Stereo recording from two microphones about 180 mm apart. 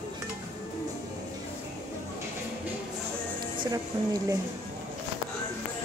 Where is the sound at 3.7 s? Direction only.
20° right (ahead or behind).